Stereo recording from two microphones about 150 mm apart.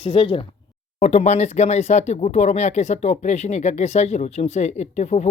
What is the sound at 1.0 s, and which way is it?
Speech, 45° left (ahead or behind).